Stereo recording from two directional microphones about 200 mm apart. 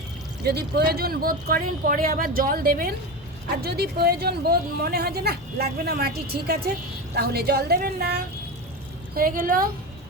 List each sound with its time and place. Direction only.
0.4 s speech: 55° right (ahead or behind)